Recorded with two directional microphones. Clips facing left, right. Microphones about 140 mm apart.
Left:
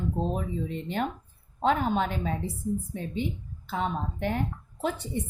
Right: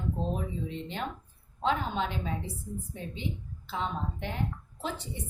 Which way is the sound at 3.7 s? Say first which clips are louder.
Left 4 dB; 50° left (ahead or behind).